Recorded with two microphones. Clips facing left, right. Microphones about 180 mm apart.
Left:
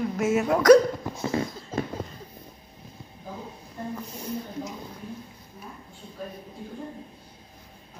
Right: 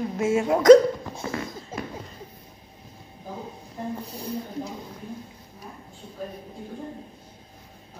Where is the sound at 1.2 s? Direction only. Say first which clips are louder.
Left 3 dB; 25° left (ahead or behind).